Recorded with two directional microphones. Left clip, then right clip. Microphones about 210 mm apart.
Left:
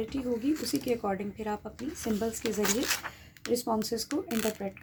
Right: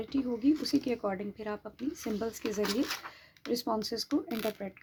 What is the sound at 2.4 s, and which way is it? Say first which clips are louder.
Speech: left 2 dB; 5° left (ahead or behind).